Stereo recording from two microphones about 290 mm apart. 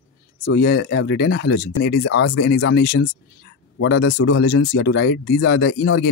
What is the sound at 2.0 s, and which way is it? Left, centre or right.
Speech, left.